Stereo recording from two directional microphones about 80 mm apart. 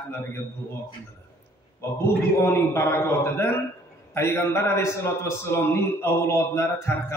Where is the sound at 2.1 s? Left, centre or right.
Left.